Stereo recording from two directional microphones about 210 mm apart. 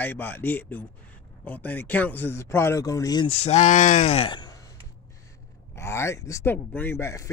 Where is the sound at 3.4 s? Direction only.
35° left (ahead or behind); by 4.6 s 20° left (ahead or behind).